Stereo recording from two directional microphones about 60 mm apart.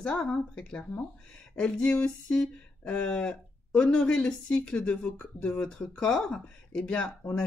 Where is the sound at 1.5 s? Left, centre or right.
Centre.